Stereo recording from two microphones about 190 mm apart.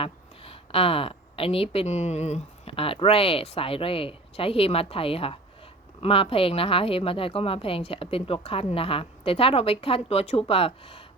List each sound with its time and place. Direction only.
0.0 s a woman's voice: 30° left (ahead or behind)